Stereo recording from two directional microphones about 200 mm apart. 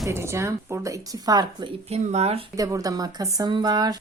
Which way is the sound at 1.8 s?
35° right (ahead or behind).